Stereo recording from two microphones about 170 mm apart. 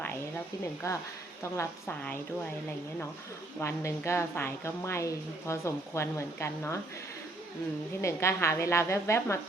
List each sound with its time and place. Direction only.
0.8 s a woman's voice: 20° left (ahead or behind)
3.6 s a woman's voice: 15° left (ahead or behind)
8.0 s a woman's voice: 15° left (ahead or behind)